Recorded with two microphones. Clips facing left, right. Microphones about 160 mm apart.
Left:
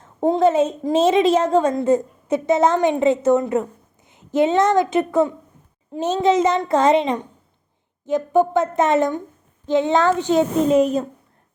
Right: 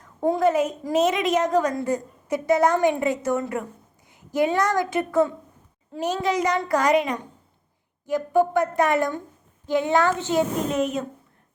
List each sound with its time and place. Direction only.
0.0 s a woman's voice: 25° left (ahead or behind)
10.7 s a child's voice: 35° left (ahead or behind)